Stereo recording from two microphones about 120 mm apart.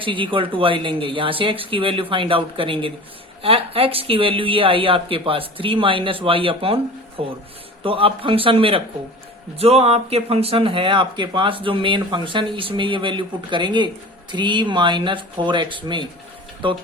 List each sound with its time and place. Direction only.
0.0 s speech: 45° right (ahead or behind)